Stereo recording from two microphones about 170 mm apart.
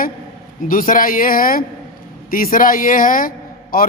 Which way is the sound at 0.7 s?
55° left (ahead or behind).